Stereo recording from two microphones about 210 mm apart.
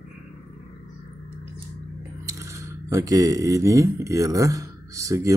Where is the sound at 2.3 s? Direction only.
15° right (ahead or behind).